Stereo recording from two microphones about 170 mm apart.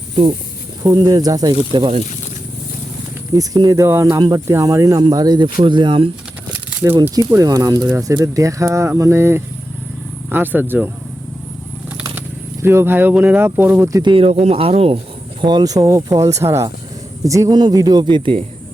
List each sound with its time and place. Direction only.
0.8 s speech: 20° right (ahead or behind); by 2.0 s 35° right (ahead or behind)
3.3 s speech: 20° right (ahead or behind)
6.5 s crumpling: 15° right (ahead or behind)
7.3 s speech: 20° right (ahead or behind)
12.6 s speech: 15° right (ahead or behind); by 14.9 s 35° right (ahead or behind)
15.4 s speech: 25° right (ahead or behind)